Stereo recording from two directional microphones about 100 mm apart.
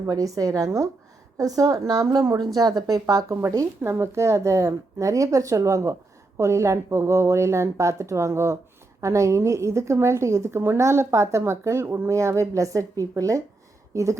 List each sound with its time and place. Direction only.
0.0 s a woman's voice: 35° right (ahead or behind)